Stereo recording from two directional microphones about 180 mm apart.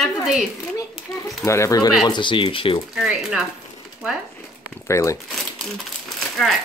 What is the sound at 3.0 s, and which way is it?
Speech, 5° right (ahead or behind).